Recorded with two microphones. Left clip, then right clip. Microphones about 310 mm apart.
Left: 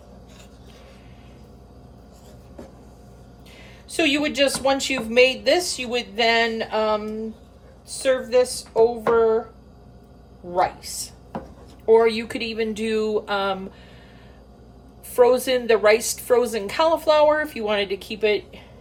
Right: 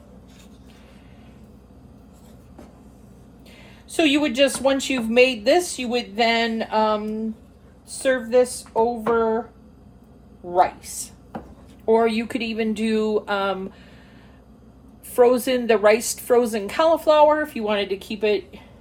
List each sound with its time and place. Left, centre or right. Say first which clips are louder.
3.8 s speech: right 1 dB; centre
10.6 s speech: right 3 dB; centre
15.1 s speech: even; centre